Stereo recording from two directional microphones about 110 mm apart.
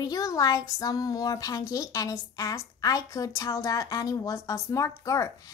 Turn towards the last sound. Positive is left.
turn(degrees=30)  # may be behind; listen again after turning